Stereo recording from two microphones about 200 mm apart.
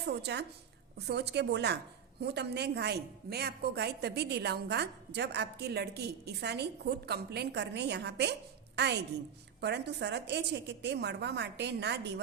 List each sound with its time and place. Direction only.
0.0 s a woman's voice: 55° right (ahead or behind)